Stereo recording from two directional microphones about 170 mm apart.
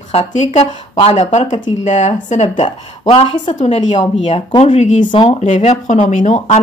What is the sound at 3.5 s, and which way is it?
Speech, 40° left (ahead or behind).